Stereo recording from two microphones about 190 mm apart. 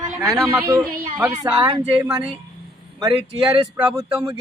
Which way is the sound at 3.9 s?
15° right (ahead or behind).